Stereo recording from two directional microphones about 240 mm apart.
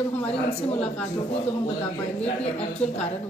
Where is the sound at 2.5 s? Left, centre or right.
Left.